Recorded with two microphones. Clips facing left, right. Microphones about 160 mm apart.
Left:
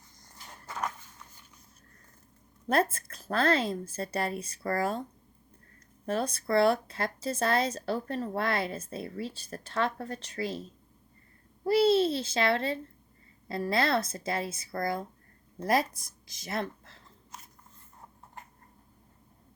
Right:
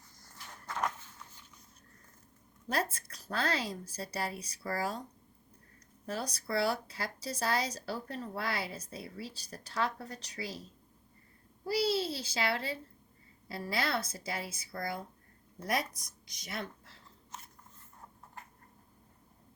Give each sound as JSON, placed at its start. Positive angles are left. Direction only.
{"t": 0.2, "sound": "a sound", "side_deg": 20}
{"t": 2.6, "sound": "a woman's voice", "side_deg": 55}
{"t": 6.1, "sound": "a woman's voice", "side_deg": 55}
{"t": 11.6, "sound": "a child's voice", "side_deg": 55}
{"t": 15.8, "sound": "speech", "side_deg": 25}
{"t": 16.5, "sound": "speech", "side_deg": 55}